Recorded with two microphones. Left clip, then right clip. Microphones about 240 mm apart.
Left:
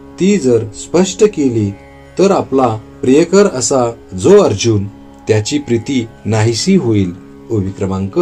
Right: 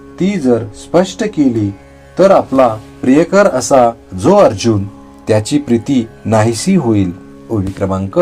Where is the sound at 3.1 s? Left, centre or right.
Right.